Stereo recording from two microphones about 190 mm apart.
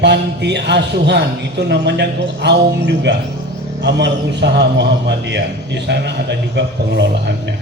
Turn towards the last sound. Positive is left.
turn(degrees=-65)  # may be behind; listen again after turning